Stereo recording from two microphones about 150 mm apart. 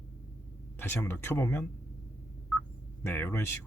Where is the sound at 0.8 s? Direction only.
15° left (ahead or behind).